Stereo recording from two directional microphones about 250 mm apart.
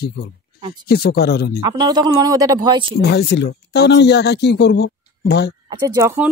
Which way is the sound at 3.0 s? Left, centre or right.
Left.